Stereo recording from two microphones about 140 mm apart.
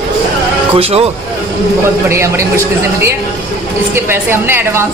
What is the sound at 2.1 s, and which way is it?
Speech, 20° right (ahead or behind).